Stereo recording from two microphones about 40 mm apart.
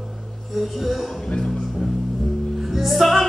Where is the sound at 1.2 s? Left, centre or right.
Centre.